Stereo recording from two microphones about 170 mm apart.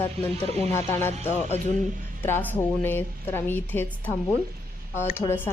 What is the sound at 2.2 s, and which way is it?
A woman's voice, 10° left (ahead or behind).